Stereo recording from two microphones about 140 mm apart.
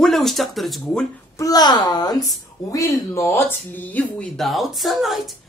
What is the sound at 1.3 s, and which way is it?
Speech, 25° left (ahead or behind).